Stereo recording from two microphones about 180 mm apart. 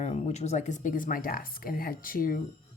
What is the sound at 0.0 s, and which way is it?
Speech, 35° left (ahead or behind).